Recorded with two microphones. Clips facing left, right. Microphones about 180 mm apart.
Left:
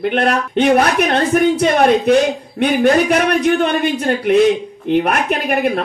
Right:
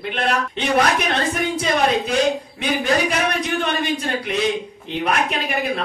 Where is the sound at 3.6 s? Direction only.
55° left (ahead or behind).